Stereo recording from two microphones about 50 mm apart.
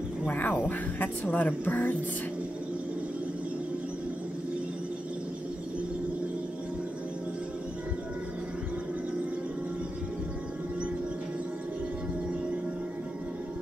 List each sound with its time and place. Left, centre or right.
0.3 s speech: left